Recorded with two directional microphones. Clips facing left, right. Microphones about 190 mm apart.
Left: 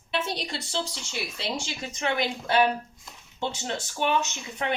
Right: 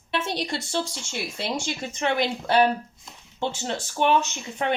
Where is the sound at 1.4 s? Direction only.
45° right (ahead or behind).